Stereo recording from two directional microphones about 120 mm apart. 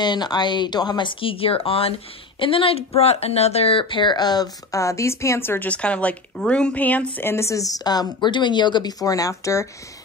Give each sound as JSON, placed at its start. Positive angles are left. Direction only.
{"t": 0.0, "sound": "speech", "side_deg": 35}